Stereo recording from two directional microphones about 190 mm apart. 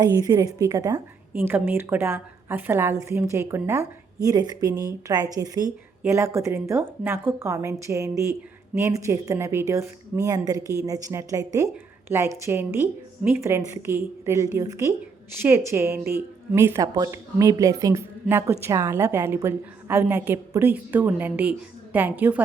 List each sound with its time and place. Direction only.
0.0 s a woman's voice: 20° right (ahead or behind)